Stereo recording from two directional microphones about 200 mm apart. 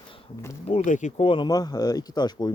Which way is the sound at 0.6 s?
35° left (ahead or behind).